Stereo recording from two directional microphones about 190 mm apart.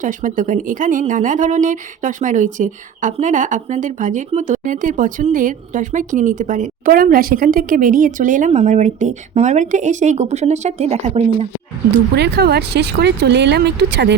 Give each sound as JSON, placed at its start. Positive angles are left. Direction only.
{"t": 0.0, "sound": "speech", "side_deg": -40}
{"t": 12.1, "sound": "speech", "side_deg": -60}